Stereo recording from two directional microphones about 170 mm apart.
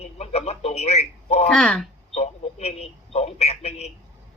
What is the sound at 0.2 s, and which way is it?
Speech, 35° left (ahead or behind).